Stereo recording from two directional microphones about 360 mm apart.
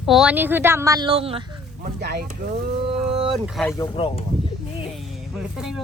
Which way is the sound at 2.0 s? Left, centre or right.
Right.